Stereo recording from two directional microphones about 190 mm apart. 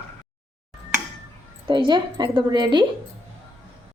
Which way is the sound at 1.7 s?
25° right (ahead or behind).